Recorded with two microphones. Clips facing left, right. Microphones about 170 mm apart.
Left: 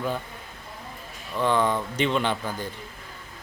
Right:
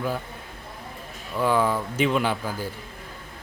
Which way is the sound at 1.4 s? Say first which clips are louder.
Right 1 dB; 5° right (ahead or behind).